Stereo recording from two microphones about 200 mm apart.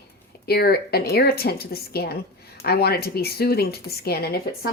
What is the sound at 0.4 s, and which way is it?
A woman's voice, 50° left (ahead or behind).